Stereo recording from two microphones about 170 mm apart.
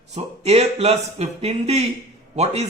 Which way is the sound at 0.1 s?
40° right (ahead or behind).